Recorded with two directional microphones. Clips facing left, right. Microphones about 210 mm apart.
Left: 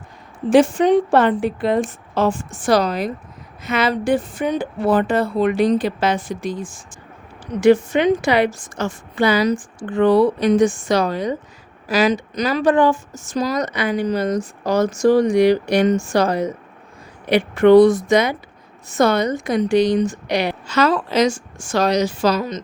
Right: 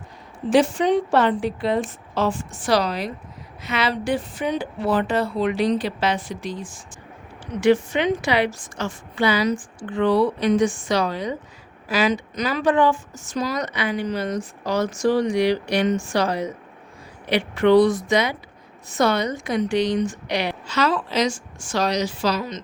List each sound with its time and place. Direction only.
0.5 s speech: 50° left (ahead or behind)